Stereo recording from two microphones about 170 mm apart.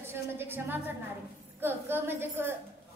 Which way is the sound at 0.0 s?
15° right (ahead or behind).